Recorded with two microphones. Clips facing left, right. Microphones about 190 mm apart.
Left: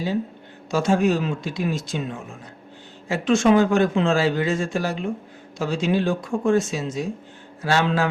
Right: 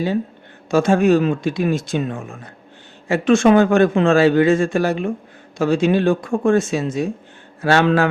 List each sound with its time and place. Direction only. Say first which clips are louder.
0.7 s a man's voice: right 6 dB; 55° right (ahead or behind)